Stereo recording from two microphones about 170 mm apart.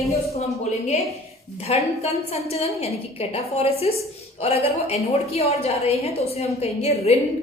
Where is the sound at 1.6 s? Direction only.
40° left (ahead or behind).